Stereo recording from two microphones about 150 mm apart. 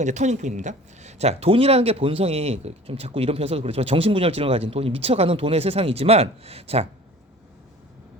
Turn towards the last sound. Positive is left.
turn(degrees=-40)  # may be behind; listen again after turning